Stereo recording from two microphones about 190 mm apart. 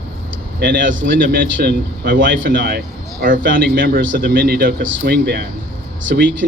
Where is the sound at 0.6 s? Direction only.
50° right (ahead or behind).